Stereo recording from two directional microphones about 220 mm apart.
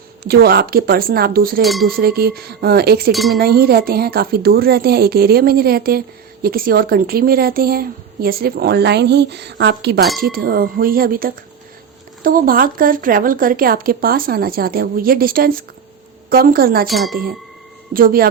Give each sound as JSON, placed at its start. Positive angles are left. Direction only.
{"t": 0.3, "sound": "a woman's voice", "side_deg": -45}
{"t": 1.6, "sound": "speech", "side_deg": 0}
{"t": 1.9, "sound": "a woman's voice", "side_deg": -45}
{"t": 3.1, "sound": "speech", "side_deg": 0}
{"t": 3.3, "sound": "a woman's voice", "side_deg": -45}
{"t": 16.9, "sound": "speech", "side_deg": 0}
{"t": 17.9, "sound": "speech", "side_deg": -40}